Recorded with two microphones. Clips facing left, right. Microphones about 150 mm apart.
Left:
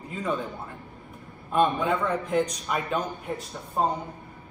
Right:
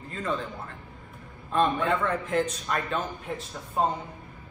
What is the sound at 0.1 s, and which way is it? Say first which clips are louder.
Speech: left 2 dB; 10° left (ahead or behind).